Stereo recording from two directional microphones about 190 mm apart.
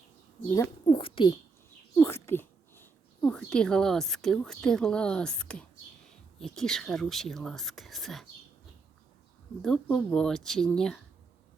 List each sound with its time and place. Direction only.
0.9 s speech: 30° left (ahead or behind)
2.0 s speech: 15° left (ahead or behind)
9.6 s speech: centre (ahead or behind)